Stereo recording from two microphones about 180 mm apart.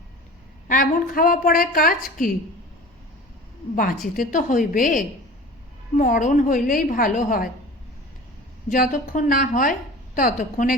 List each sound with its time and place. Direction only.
0.7 s a woman's voice: 50° left (ahead or behind)
3.8 s a woman's voice: 50° left (ahead or behind)
8.7 s a woman's voice: 45° left (ahead or behind)